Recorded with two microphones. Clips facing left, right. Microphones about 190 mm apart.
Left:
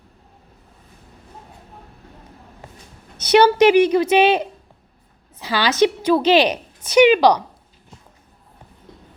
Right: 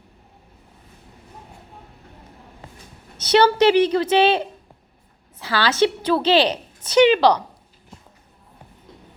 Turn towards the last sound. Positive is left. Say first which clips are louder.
# left 2 dB
turn(degrees=10)  # may be behind; listen again after turning